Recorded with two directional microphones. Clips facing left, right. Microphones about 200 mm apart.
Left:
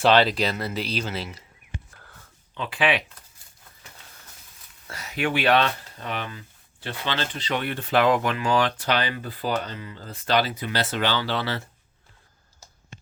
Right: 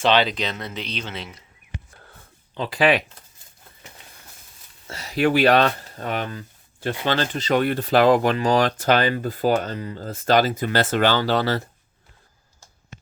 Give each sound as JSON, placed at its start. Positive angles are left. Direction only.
{"t": 0.0, "sound": "speech", "side_deg": 5}
{"t": 2.6, "sound": "speech", "side_deg": -40}
{"t": 4.9, "sound": "speech", "side_deg": -30}